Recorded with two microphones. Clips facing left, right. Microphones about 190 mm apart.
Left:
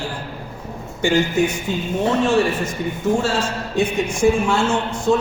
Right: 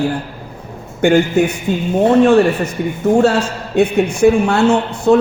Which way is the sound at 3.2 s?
65° right (ahead or behind).